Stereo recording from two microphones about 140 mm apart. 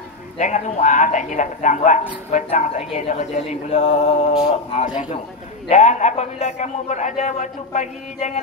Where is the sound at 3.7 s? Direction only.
55° left (ahead or behind).